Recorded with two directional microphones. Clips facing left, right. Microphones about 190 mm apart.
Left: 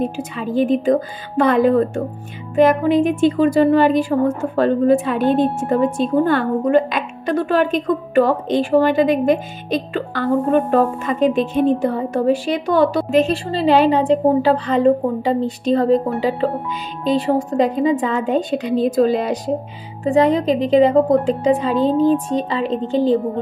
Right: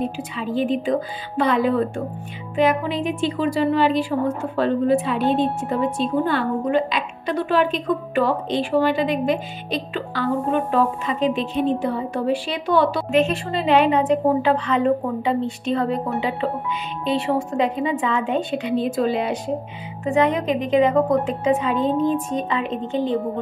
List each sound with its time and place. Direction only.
0.0 s a woman's voice: 45° left (ahead or behind)